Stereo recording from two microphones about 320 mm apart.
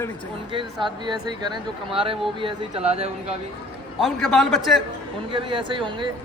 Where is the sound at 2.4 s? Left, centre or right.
Centre.